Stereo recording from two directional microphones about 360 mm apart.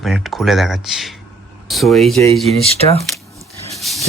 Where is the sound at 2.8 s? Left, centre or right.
Centre.